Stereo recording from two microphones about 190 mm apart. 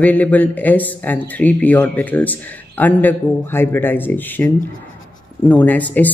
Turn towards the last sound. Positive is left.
turn(degrees=10)  # may be behind; listen again after turning